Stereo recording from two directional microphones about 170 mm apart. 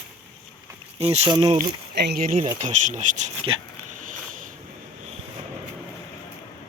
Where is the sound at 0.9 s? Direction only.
35° right (ahead or behind).